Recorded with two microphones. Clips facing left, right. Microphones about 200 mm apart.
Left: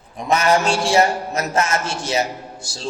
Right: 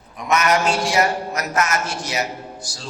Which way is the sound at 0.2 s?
30° left (ahead or behind).